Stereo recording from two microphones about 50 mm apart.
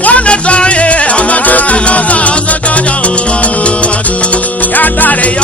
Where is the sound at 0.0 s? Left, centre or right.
Left.